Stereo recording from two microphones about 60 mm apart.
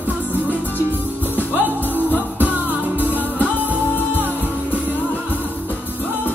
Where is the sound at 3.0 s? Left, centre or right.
Left.